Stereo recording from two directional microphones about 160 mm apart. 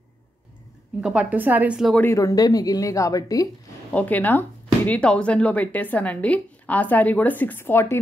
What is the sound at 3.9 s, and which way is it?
A woman's voice, 10° left (ahead or behind).